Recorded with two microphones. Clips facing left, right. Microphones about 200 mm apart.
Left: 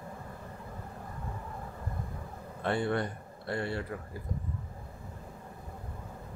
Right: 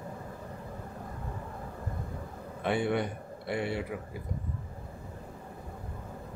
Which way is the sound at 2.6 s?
15° right (ahead or behind).